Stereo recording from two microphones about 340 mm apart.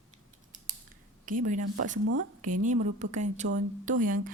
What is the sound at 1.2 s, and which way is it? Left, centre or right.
Speech, right.